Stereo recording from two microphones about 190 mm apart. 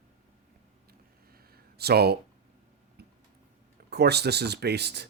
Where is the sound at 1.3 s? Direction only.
55° right (ahead or behind).